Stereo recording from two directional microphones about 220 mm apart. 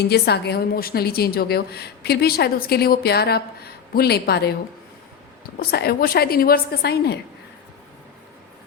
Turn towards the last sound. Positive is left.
turn(degrees=45)  # may be behind; listen again after turning